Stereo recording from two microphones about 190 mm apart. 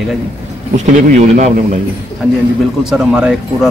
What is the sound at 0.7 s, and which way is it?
Speech, 40° right (ahead or behind).